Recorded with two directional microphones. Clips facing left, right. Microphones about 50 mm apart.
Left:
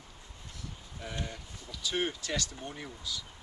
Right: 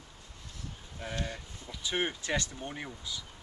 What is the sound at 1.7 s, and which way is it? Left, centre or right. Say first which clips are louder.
Speech: even; right.